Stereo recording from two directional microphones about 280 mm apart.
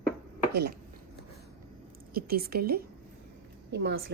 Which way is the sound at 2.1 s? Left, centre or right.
Right.